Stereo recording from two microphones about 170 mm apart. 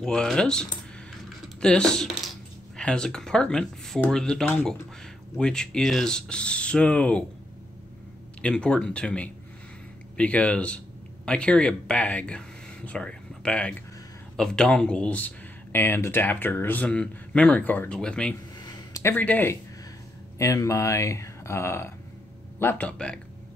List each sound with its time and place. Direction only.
0.0 s speech: 5° left (ahead or behind)
8.4 s speech: 5° left (ahead or behind)
18.6 s a sound: 20° left (ahead or behind)
20.3 s speech: 20° left (ahead or behind)